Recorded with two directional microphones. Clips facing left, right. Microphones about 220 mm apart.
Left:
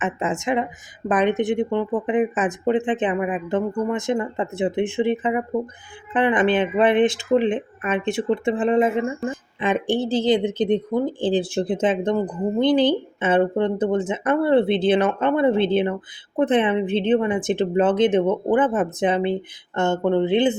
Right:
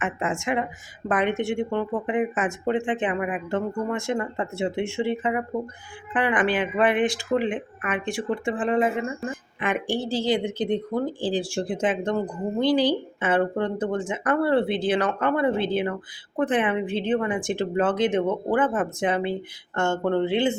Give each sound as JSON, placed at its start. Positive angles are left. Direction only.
{"t": 0.0, "sound": "speech", "side_deg": 20}